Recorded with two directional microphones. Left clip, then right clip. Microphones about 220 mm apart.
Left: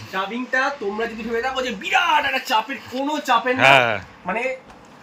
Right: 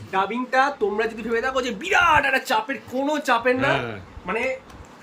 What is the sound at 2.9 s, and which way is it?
Speech, 5° right (ahead or behind).